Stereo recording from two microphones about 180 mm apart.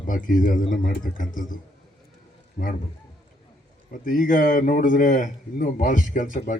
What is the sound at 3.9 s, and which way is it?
A man's voice, 50° left (ahead or behind).